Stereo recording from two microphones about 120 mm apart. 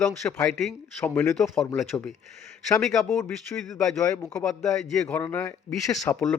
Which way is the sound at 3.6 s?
5° left (ahead or behind).